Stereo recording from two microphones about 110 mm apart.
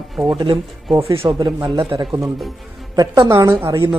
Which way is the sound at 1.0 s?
55° right (ahead or behind).